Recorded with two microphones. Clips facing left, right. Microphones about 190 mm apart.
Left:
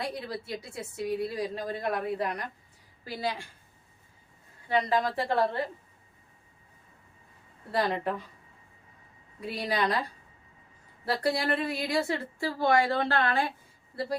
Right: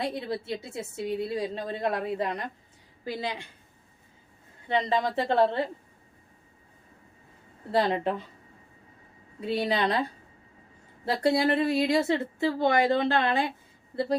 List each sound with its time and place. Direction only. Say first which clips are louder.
0.0 s a woman's voice: right 4 dB; 25° right (ahead or behind)
4.7 s a woman's voice: right 1 dB; 20° right (ahead or behind)
7.7 s a woman's voice: right 3 dB; 25° right (ahead or behind)
9.4 s a woman's voice: right 3 dB; 25° right (ahead or behind)